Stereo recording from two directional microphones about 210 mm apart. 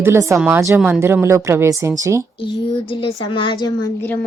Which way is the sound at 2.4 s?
25° left (ahead or behind).